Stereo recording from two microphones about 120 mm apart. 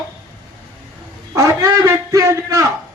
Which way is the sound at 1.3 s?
30° right (ahead or behind).